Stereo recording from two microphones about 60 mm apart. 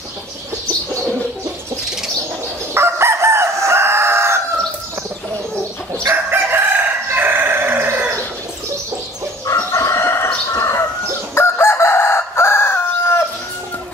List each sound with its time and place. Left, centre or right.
2.7 s chicken: right
6.3 s chicken: right
9.6 s chicken: left
10.5 s bird: left
11.3 s chicken: left